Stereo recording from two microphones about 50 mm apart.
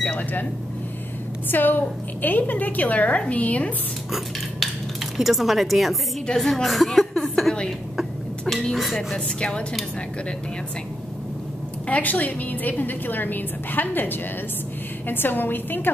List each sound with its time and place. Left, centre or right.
0.0 s speech: left
1.5 s a woman's voice: left
5.1 s speech: centre
6.2 s speech: centre
8.7 s speech: centre
9.1 s a woman's voice: centre
11.9 s a woman's voice: left